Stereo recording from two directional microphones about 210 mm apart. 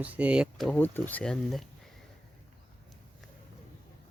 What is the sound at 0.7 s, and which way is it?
Speech, 10° left (ahead or behind).